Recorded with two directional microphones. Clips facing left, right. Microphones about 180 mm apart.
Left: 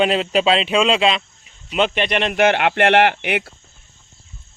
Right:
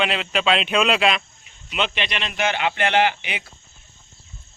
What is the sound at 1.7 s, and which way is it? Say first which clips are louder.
Speech: left 7 dB; 45° left (ahead or behind).